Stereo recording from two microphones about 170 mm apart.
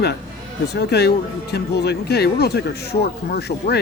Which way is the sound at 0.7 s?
70° left (ahead or behind).